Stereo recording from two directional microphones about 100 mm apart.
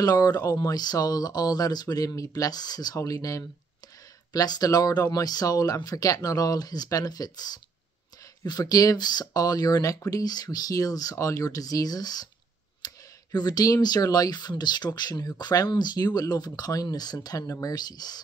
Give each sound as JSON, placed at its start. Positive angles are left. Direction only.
{"t": 0.0, "sound": "speech", "side_deg": 40}